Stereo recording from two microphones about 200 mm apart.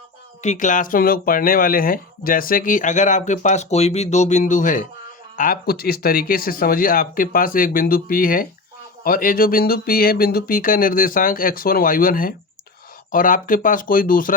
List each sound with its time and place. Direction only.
0.4 s speech: 40° left (ahead or behind)